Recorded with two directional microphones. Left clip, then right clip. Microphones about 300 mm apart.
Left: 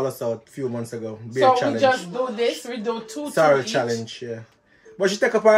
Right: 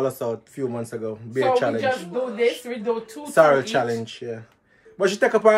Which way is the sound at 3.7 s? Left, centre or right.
Centre.